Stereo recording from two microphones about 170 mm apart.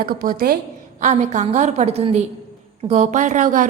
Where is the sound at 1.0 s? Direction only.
45° right (ahead or behind).